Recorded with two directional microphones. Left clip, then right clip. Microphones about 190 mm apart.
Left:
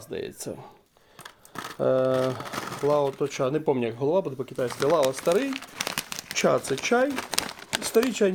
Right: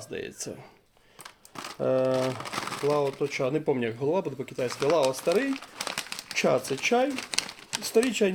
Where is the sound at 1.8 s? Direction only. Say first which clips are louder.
Left 2 dB; 40° left (ahead or behind).